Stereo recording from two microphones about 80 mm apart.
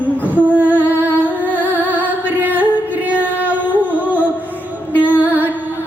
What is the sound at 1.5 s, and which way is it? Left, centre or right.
Music, right.